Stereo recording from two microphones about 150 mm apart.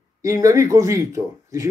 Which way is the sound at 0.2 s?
20° right (ahead or behind).